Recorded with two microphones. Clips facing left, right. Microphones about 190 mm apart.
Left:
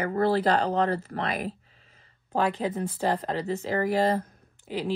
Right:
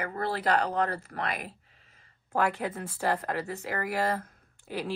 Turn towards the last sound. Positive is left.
turn(degrees=20)  # may be behind; listen again after turning